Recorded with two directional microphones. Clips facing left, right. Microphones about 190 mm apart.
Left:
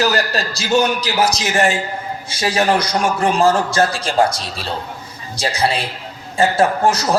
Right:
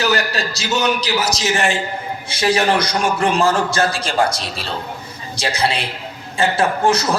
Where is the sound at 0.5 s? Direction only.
50° left (ahead or behind).